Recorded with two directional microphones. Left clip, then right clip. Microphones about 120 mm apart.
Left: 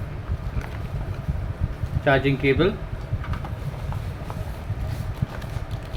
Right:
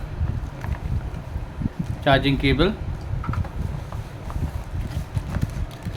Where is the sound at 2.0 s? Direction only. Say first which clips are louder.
Even; 80° right.